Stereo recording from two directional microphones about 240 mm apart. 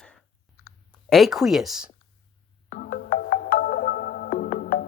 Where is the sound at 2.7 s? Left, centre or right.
Left.